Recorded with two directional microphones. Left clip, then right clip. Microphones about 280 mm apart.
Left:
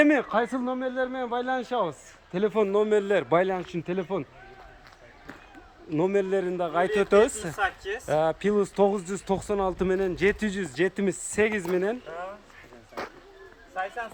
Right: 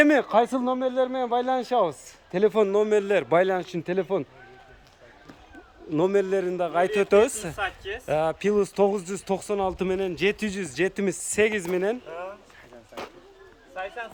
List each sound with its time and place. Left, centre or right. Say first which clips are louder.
0.0 s a man's voice: right 3 dB; centre
5.9 s a man's voice: right 2 dB; centre
13.0 s speech: left 2 dB; centre
13.7 s speech: left 2 dB; centre